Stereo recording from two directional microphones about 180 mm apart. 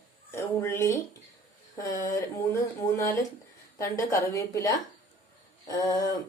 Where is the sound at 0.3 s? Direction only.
15° left (ahead or behind).